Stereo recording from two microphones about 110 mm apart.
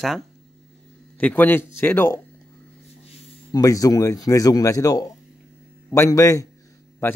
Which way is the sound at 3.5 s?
35° left (ahead or behind).